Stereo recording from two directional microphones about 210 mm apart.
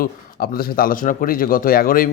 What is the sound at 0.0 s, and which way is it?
Speech, 45° left (ahead or behind).